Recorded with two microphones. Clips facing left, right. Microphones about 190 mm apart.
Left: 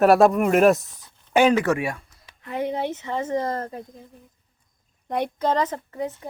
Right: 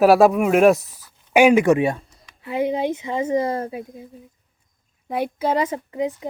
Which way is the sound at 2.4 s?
10° right (ahead or behind).